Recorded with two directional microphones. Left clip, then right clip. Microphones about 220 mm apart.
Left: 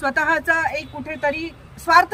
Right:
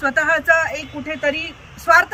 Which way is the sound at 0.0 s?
20° left (ahead or behind).